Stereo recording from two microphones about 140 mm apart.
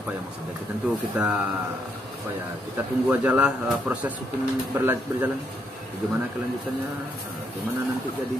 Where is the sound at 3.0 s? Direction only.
10° right (ahead or behind).